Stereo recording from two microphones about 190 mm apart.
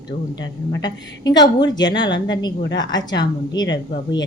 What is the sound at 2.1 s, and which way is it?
Speech, 75° left (ahead or behind).